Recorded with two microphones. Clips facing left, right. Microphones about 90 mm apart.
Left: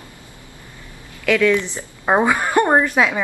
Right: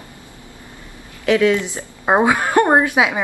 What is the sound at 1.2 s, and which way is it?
A woman's voice, 20° right (ahead or behind).